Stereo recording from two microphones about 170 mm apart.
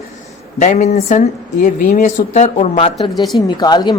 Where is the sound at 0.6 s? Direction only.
40° left (ahead or behind).